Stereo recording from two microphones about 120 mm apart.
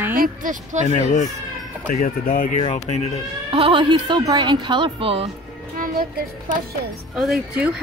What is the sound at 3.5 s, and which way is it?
A woman's voice, 50° right (ahead or behind).